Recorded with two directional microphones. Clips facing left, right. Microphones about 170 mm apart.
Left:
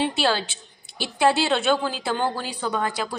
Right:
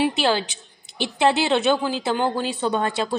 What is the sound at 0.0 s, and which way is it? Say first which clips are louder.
A woman's voice: right 2 dB; 15° right (ahead or behind).